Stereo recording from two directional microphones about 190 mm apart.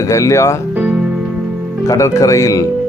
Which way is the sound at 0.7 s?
5° right (ahead or behind).